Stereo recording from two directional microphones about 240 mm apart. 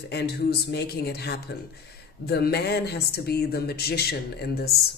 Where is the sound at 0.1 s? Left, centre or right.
Left.